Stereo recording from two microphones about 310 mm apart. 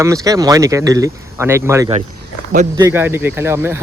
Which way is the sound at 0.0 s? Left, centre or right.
Centre.